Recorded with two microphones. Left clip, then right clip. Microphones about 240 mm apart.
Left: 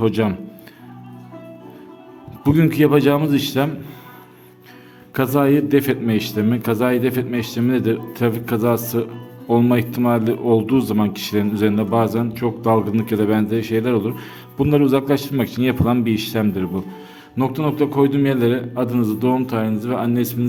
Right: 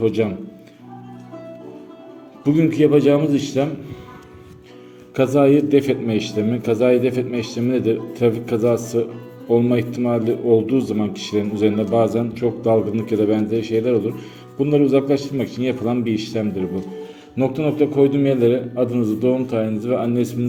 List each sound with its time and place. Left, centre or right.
0.0 s a man's voice: left
2.4 s a man's voice: left
5.1 s a man's voice: left